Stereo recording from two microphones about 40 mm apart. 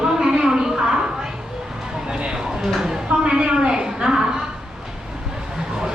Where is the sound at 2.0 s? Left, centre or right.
Right.